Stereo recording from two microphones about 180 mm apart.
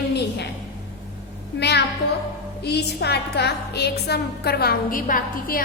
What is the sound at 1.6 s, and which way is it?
A woman's voice, 70° left (ahead or behind).